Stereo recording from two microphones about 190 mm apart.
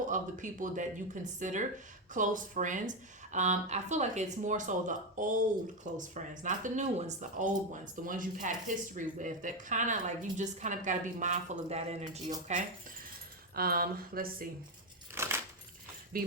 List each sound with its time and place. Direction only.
0.0 s speech: 40° right (ahead or behind)
13.6 s speech: 50° right (ahead or behind)
15.1 s a sound: 15° right (ahead or behind)
16.1 s speech: 50° right (ahead or behind)